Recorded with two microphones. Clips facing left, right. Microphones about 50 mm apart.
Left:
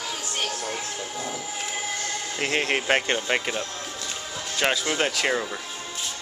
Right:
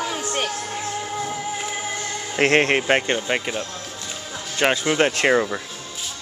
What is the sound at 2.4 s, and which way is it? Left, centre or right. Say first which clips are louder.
Speech: right 9 dB; right.